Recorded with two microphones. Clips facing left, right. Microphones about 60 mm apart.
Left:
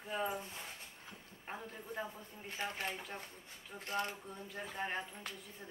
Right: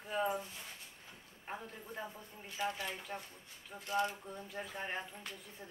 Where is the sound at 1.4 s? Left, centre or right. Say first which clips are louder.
Even; centre.